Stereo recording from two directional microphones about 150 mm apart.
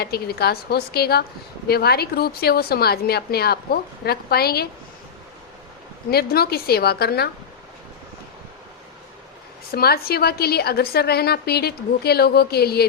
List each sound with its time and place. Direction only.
0.0 s a woman's voice: 90° left
6.1 s a woman's voice: 90° left
9.7 s a woman's voice: 90° left